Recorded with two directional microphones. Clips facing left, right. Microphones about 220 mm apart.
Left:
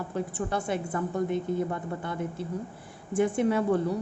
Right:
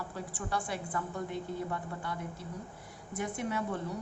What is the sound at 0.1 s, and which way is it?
Speech, 25° left (ahead or behind).